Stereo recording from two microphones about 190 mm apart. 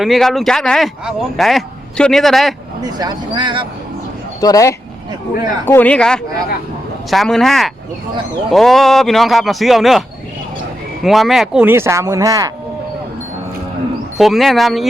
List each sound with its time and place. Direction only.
0.0 s speech: centre (ahead or behind)
2.8 s speech: 20° right (ahead or behind)
4.4 s speech: 20° left (ahead or behind); by 10.0 s centre (ahead or behind)
11.0 s speech: centre (ahead or behind); by 12.5 s 20° right (ahead or behind)
14.2 s speech: centre (ahead or behind)